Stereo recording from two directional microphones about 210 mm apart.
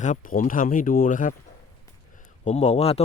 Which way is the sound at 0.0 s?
40° left (ahead or behind).